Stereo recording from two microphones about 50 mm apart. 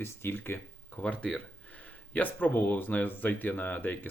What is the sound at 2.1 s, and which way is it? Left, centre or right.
Speech, left.